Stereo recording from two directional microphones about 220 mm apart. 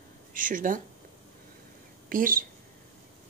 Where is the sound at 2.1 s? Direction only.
40° right (ahead or behind).